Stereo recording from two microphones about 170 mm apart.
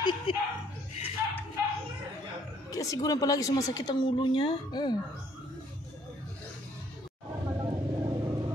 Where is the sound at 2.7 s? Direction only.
20° left (ahead or behind).